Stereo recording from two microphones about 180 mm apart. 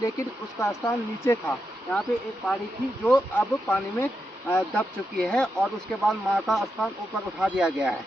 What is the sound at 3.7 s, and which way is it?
Speech, 15° left (ahead or behind).